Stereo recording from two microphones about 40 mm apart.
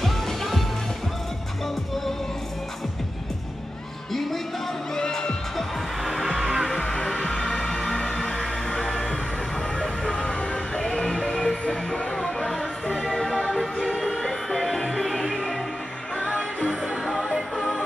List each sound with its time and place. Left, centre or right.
0.0 s music: centre
4.1 s music: centre
6.0 s music: centre
7.1 s music: centre
10.1 s music: centre
11.7 s music: left
12.2 s music: centre
17.0 s music: centre